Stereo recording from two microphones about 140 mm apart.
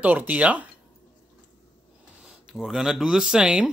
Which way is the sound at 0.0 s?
10° right (ahead or behind).